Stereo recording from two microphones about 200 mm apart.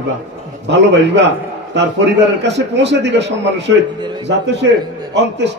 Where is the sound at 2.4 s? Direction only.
60° right (ahead or behind).